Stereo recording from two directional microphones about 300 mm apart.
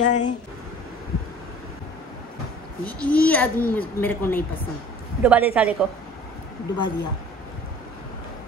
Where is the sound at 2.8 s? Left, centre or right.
Centre.